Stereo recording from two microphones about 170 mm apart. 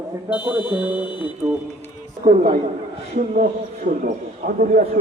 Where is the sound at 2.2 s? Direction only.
50° right (ahead or behind).